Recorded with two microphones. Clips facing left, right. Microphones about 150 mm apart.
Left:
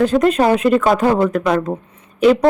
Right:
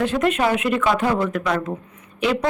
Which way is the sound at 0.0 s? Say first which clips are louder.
Left 6 dB; 40° left (ahead or behind).